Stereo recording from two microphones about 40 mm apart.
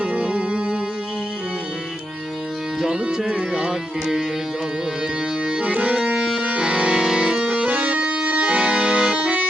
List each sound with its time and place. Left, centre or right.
0.0 s music: right
2.8 s music: centre
5.5 s music: right
6.1 s music: centre
6.6 s music: right
7.7 s accordion: right